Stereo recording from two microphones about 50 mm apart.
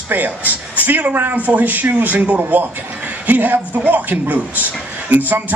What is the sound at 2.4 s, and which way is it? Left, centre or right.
A man's voice, right.